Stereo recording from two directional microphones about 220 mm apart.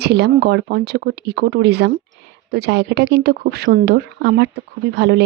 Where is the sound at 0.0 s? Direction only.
50° right (ahead or behind).